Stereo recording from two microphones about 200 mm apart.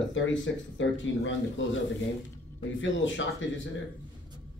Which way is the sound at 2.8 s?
70° left (ahead or behind).